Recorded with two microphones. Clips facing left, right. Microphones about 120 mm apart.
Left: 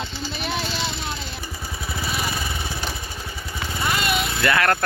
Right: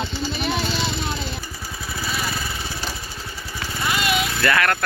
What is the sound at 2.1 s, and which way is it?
Vehicle, 10° left (ahead or behind).